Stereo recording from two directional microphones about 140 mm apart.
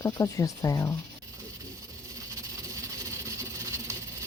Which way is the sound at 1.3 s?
25° right (ahead or behind).